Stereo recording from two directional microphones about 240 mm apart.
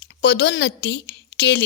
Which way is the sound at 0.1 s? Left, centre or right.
Left.